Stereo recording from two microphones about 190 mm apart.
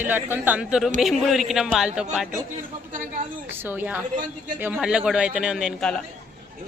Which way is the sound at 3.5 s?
10° right (ahead or behind).